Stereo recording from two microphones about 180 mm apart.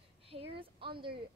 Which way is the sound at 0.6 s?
30° right (ahead or behind).